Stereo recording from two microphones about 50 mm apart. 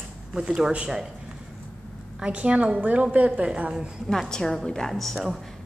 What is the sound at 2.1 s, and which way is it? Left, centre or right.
A woman's voice, right.